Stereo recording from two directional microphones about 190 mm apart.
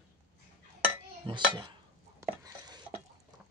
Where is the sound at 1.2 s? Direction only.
25° right (ahead or behind).